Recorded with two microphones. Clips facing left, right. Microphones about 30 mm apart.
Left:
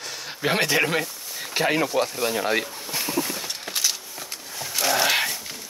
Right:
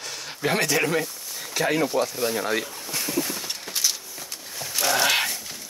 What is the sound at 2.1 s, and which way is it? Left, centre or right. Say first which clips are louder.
Speech: left 1 dB; centre.